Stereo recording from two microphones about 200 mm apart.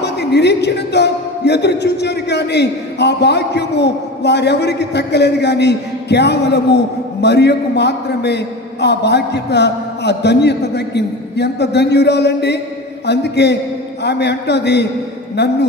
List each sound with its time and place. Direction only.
0.0 s a man's voice: 55° left (ahead or behind)